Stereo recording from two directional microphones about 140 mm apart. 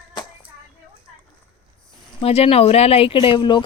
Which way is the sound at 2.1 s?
45° left (ahead or behind).